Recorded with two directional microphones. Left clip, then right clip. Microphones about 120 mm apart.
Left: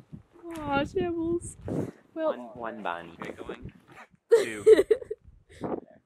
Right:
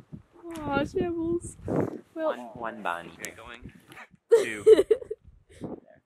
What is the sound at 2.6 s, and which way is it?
Speech, 25° right (ahead or behind).